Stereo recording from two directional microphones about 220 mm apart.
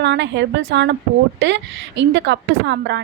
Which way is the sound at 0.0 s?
55° right (ahead or behind).